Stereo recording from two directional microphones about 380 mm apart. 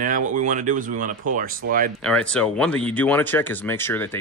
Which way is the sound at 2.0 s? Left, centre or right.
Centre.